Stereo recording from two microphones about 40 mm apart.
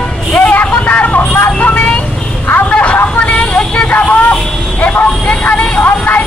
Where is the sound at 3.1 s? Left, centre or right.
Left.